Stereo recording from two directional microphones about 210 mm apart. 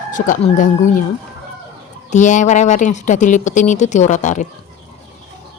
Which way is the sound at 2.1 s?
35° left (ahead or behind).